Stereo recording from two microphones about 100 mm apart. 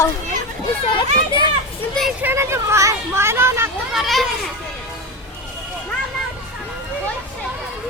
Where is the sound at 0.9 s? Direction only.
55° left (ahead or behind).